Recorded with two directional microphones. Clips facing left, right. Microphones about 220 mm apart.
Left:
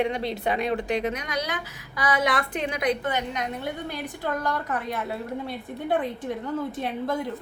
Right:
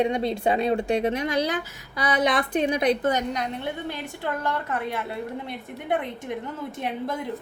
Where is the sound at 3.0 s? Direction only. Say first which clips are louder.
Right 4 dB; 40° right (ahead or behind).